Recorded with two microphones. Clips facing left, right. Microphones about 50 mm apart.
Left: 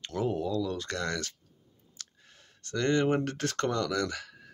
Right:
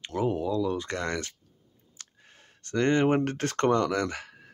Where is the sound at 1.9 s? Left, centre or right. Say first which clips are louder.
Even; right.